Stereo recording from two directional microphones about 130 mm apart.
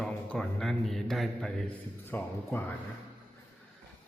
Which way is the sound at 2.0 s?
15° left (ahead or behind).